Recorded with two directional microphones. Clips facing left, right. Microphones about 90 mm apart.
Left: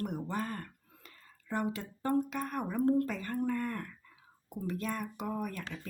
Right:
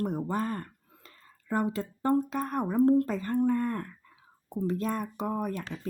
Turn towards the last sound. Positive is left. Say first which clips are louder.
# right 5 dB
turn(degrees=-30)  # may be behind; listen again after turning